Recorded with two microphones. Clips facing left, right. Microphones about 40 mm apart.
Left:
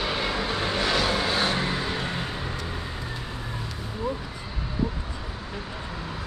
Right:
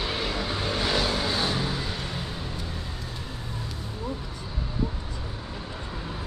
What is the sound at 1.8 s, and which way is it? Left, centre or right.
Vehicle, left.